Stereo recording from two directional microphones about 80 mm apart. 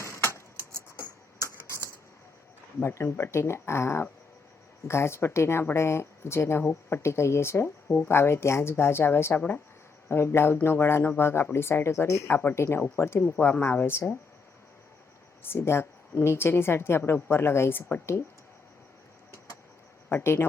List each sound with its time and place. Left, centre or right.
0.0 s a sound: left
2.8 s speech: left
7.9 s speech: left
8.1 s speech: left
15.4 s speech: left
20.1 s speech: left